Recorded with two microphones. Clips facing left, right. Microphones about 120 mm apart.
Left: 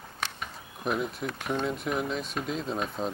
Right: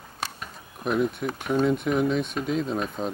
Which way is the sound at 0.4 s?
Centre (ahead or behind).